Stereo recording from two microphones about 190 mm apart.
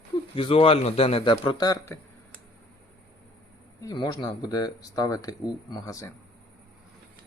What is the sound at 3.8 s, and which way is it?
A man's voice, 20° left (ahead or behind).